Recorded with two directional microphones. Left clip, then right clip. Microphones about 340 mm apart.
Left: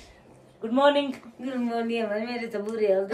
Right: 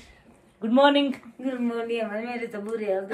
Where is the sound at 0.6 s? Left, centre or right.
Right.